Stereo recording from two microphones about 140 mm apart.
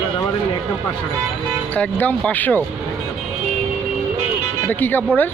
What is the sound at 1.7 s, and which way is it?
Speech, 10° left (ahead or behind).